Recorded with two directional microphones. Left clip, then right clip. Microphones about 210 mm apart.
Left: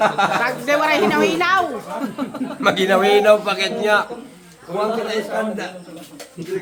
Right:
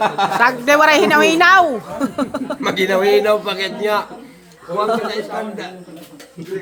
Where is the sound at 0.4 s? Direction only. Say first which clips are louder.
Right 6 dB; 40° right (ahead or behind).